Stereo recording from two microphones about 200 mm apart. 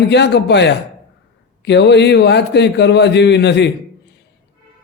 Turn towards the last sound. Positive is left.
turn(degrees=60)  # may be behind; listen again after turning